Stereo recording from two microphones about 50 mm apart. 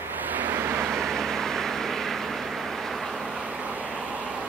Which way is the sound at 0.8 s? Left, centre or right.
Centre.